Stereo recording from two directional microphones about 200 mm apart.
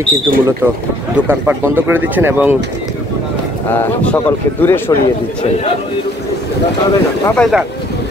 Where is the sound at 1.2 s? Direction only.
10° right (ahead or behind).